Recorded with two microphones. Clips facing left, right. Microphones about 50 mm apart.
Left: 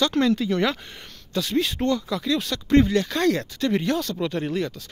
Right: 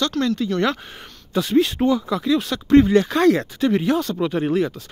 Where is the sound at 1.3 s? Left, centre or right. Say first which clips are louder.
Right 6 dB; centre.